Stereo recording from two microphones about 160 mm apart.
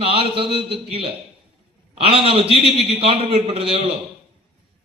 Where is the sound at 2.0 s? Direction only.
35° right (ahead or behind).